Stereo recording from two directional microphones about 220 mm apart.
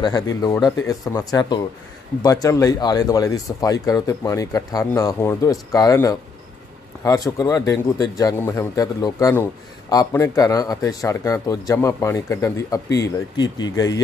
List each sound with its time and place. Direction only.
0.4 s speech: 15° left (ahead or behind)